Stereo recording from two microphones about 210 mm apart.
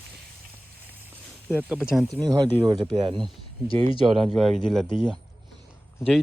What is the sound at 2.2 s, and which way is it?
Speech, 20° right (ahead or behind).